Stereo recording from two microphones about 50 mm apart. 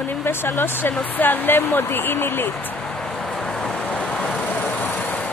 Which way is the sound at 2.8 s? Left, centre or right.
Centre.